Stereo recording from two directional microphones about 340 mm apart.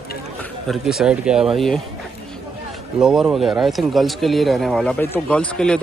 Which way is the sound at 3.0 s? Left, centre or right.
Centre.